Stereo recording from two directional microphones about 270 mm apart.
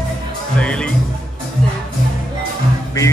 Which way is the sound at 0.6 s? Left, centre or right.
Centre.